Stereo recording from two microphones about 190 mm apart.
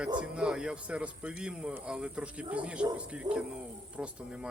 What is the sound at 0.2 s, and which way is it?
Speech, 5° right (ahead or behind).